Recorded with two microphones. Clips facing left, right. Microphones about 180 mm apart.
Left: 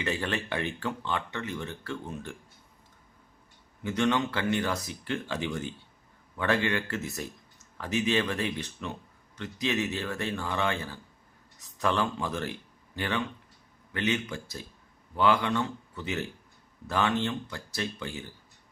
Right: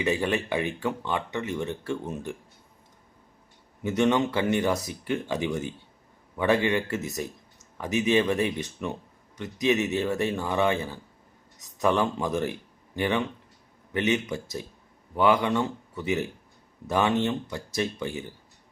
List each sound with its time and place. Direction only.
0.0 s speech: 15° right (ahead or behind)
3.8 s speech: 15° right (ahead or behind)